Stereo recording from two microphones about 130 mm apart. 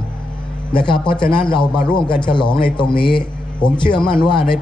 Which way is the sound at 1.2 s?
40° left (ahead or behind).